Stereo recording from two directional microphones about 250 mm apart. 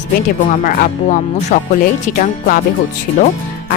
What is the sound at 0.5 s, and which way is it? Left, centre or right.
Speech, left.